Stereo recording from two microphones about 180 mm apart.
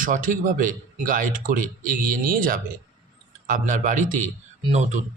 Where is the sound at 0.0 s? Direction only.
50° right (ahead or behind).